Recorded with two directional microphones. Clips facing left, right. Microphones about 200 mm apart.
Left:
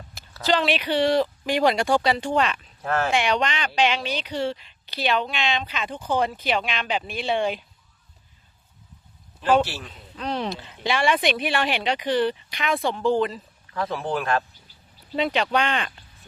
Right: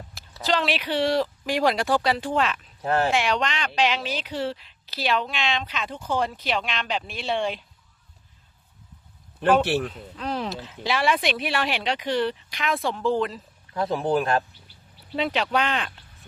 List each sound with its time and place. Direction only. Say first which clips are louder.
0.1 s speech: left 2 dB; centre (ahead or behind)
2.8 s speech: right 2 dB; 15° right (ahead or behind)
3.1 s a woman's voice: left 1 dB; centre (ahead or behind)
9.6 s speech: right 12 dB; 60° right (ahead or behind)
10.2 s a woman's voice: left 1 dB; centre (ahead or behind)
13.7 s speech: right 2 dB; 15° right (ahead or behind)
14.0 s speech: right 3 dB; 35° right (ahead or behind)
15.1 s a woman's voice: left 1 dB; centre (ahead or behind)